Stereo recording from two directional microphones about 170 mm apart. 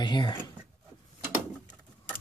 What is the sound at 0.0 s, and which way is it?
Speech, 25° left (ahead or behind).